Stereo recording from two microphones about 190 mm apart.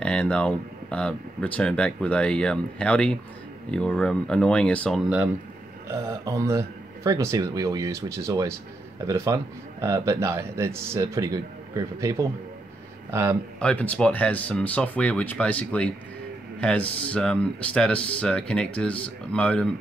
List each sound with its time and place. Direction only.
0.0 s speech: 5° left (ahead or behind)
6.0 s speech: 15° right (ahead or behind)
13.6 s speech: 5° left (ahead or behind)